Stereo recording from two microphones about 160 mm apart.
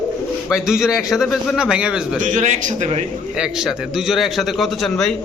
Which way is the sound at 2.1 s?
50° right (ahead or behind).